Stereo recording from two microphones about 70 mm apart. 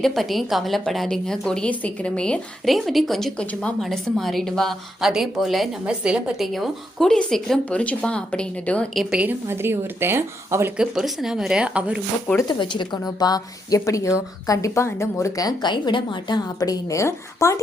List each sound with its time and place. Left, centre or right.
0.0 s a woman's voice: centre
2.6 s a woman's voice: centre
5.8 s speech: centre
6.4 s a woman's voice: centre
9.5 s speech: right
10.8 s speech: centre
12.5 s a woman's voice: left
15.4 s a woman's voice: left
16.3 s a woman's voice: left
16.9 s speech: left